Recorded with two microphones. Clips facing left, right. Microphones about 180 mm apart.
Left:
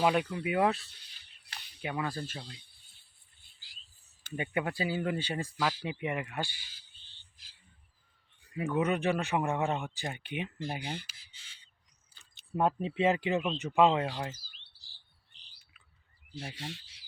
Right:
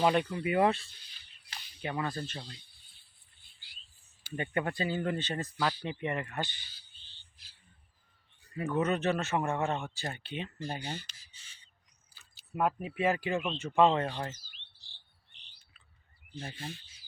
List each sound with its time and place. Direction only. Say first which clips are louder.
0.0 s speech: right 1 dB; 5° left (ahead or behind)
2.6 s a sound: even; 50° left (ahead or behind)
4.4 s speech: even; 10° left (ahead or behind)
8.5 s speech: even; 15° left (ahead or behind)
12.5 s speech: left 2 dB; 25° left (ahead or behind); by 14.3 s 10° left (ahead or behind)
14.3 s chirp: even; 35° left (ahead or behind)
14.9 s cricket: right 2 dB; 35° left (ahead or behind)